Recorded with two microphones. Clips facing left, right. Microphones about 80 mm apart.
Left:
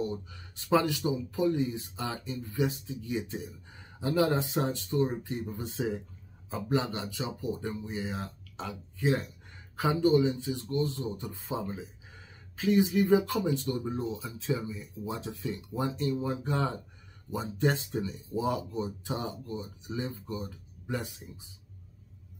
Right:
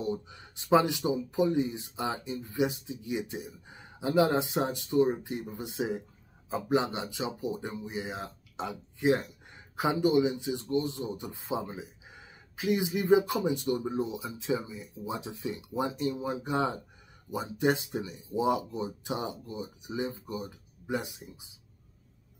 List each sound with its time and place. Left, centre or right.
0.0 s speech: right